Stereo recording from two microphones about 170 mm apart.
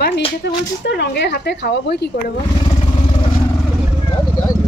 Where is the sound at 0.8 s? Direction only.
85° left.